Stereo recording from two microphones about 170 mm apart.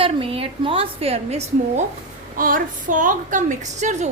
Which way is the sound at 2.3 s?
55° right (ahead or behind).